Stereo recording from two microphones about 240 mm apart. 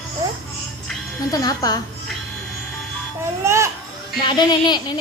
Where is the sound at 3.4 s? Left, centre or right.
Centre.